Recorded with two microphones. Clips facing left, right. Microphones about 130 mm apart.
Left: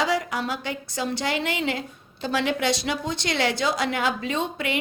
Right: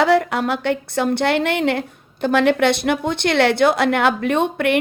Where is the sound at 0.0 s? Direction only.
60° right (ahead or behind).